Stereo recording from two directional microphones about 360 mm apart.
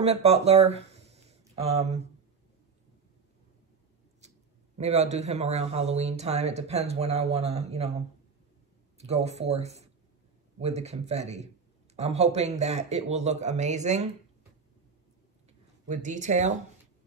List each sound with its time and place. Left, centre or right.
0.0 s speech: centre
4.7 s a man's voice: centre
8.9 s a man's voice: centre
15.9 s speech: centre